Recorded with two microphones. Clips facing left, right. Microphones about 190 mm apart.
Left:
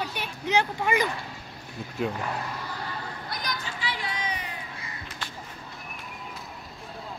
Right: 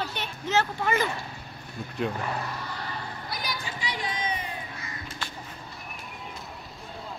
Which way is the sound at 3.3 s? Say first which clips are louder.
Even; 5° right (ahead or behind).